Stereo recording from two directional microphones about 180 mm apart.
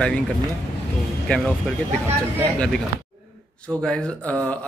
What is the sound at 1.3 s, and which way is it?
Speech, 5° left (ahead or behind).